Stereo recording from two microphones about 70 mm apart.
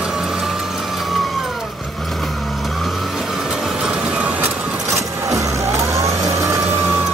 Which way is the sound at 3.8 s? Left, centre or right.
Centre.